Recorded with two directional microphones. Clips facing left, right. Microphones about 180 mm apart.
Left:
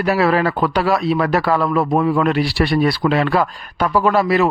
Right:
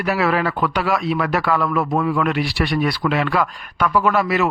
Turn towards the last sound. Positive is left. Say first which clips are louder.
# left 3 dB
turn(degrees=30)  # may be behind; listen again after turning